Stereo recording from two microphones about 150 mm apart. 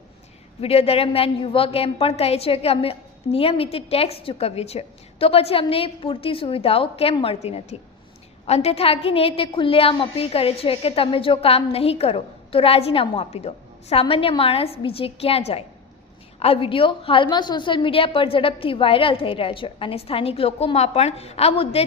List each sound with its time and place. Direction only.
0.6 s a woman's voice: 40° left (ahead or behind)